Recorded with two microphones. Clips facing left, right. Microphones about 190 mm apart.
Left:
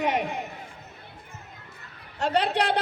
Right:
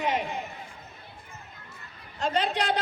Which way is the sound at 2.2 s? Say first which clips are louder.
Left 3 dB; 70° left (ahead or behind).